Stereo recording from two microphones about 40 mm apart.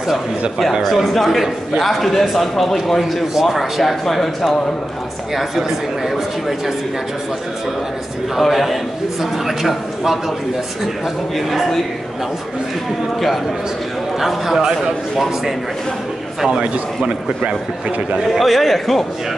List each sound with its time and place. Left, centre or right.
0.8 s a man's voice: centre
8.4 s a man's voice: centre
11.3 s a man's voice: centre
14.2 s a man's voice: centre
16.5 s a man's voice: right
18.3 s a man's voice: centre